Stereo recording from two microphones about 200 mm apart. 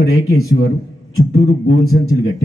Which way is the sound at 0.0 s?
50° left (ahead or behind).